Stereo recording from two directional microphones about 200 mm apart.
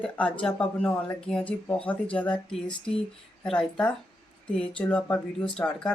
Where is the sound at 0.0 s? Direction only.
5° left (ahead or behind).